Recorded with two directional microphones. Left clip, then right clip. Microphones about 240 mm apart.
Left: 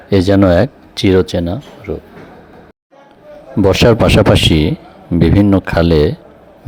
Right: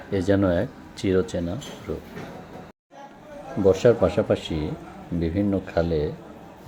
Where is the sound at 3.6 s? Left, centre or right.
Left.